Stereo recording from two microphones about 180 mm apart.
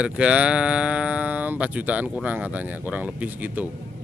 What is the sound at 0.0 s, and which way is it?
Speech, 5° right (ahead or behind).